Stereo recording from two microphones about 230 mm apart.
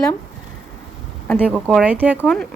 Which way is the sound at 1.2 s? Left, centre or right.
Centre.